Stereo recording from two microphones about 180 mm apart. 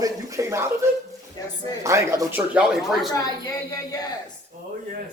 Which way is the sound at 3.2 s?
20° left (ahead or behind).